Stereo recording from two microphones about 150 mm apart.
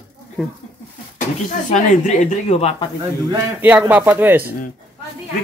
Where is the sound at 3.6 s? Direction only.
10° right (ahead or behind).